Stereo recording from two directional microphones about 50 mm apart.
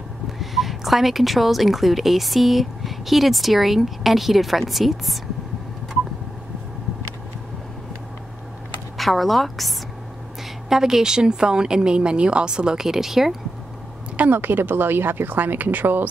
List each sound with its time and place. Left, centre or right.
0.4 s a woman's voice: centre
8.9 s a woman's voice: centre
10.7 s a woman's voice: centre
14.3 s speech: right